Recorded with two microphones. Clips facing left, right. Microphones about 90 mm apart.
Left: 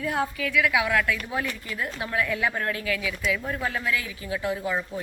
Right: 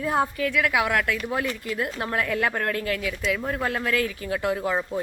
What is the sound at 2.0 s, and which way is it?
A woman's voice, 50° right (ahead or behind).